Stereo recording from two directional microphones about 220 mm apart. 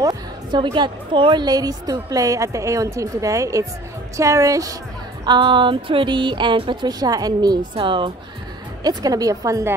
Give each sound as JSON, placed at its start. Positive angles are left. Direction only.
{"t": 0.0, "sound": "a woman's voice", "side_deg": -20}
{"t": 5.2, "sound": "a sound", "side_deg": -20}
{"t": 8.8, "sound": "a woman's voice", "side_deg": -15}